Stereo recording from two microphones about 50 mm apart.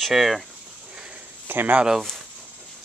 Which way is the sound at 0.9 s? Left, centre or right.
Centre.